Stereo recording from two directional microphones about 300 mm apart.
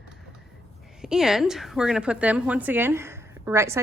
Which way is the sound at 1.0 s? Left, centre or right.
Centre.